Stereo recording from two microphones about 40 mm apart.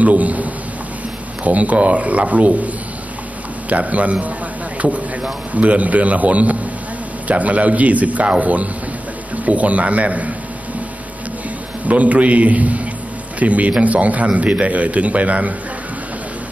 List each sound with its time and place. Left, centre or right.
0.0 s a man's voice: right
5.5 s a man's voice: right
11.8 s a man's voice: right